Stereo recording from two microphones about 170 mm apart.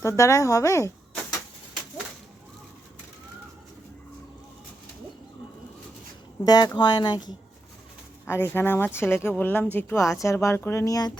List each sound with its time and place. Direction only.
0.0 s speech: 15° left (ahead or behind)
6.4 s speech: 25° left (ahead or behind)
8.2 s speech: 15° left (ahead or behind)